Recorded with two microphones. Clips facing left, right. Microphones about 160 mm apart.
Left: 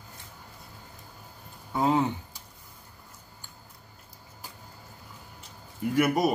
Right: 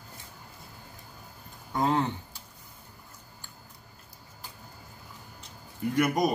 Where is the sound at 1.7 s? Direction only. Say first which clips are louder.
Left 2 dB; 10° left (ahead or behind).